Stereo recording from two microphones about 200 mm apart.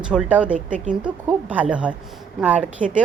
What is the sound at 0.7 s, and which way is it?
Speech, 40° right (ahead or behind).